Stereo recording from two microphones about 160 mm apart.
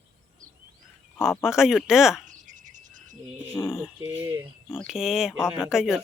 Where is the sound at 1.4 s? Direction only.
5° right (ahead or behind).